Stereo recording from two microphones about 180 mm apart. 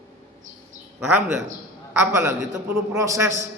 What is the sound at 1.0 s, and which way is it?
A man's voice, 10° right (ahead or behind).